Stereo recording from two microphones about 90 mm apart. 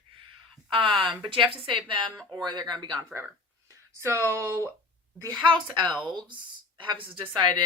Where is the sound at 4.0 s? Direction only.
30° right (ahead or behind).